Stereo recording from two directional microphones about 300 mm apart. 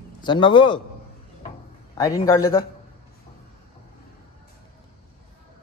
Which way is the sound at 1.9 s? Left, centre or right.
Centre.